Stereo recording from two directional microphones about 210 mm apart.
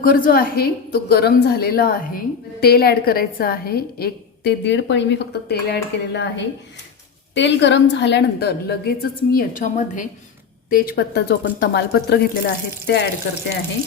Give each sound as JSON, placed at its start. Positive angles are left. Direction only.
{"t": 0.0, "sound": "a woman's voice", "side_deg": 45}
{"t": 7.3, "sound": "a woman's voice", "side_deg": 60}